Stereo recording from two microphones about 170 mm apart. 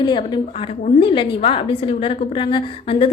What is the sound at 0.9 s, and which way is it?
A woman's voice, 30° left (ahead or behind).